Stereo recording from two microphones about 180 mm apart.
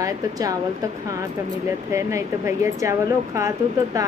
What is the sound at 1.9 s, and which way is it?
A woman's voice, 15° right (ahead or behind).